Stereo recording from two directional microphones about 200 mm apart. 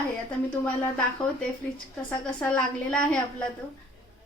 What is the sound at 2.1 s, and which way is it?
A woman's voice, 5° left (ahead or behind).